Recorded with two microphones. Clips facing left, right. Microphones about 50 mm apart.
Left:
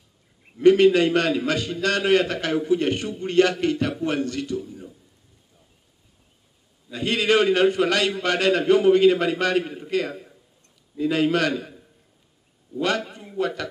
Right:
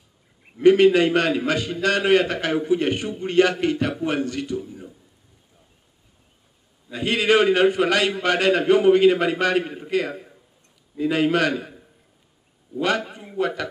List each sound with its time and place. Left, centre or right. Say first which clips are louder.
0.6 s a man's voice: right 1 dB; right
6.9 s a man's voice: right 2 dB; right